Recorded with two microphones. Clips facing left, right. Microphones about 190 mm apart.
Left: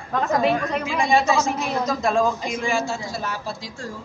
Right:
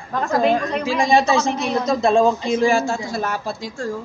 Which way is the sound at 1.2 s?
10° left (ahead or behind).